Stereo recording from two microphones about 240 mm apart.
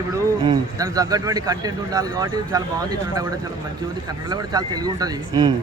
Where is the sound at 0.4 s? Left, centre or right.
Centre.